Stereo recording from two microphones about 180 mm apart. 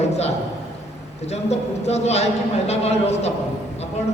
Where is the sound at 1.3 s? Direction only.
35° left (ahead or behind).